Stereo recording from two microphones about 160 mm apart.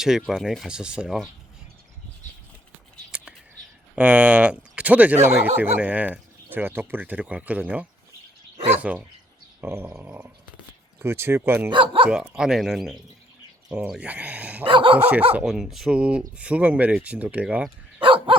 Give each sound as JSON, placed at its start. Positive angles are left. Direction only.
{"t": 0.0, "sound": "speech", "side_deg": 0}
{"t": 3.1, "sound": "whispering", "side_deg": -5}
{"t": 3.9, "sound": "speech", "side_deg": -5}
{"t": 9.6, "sound": "a sound", "side_deg": -15}
{"t": 9.9, "sound": "speech", "side_deg": -10}
{"t": 11.7, "sound": "speech", "side_deg": -30}
{"t": 12.3, "sound": "speech", "side_deg": -5}
{"t": 14.7, "sound": "speech", "side_deg": -30}
{"t": 14.9, "sound": "speech", "side_deg": -10}
{"t": 18.0, "sound": "dog", "side_deg": -35}